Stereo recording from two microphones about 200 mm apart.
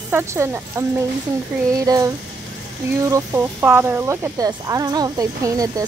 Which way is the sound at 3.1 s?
15° right (ahead or behind).